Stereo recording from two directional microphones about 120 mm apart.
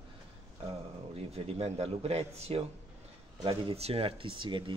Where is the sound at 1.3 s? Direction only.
60° right (ahead or behind).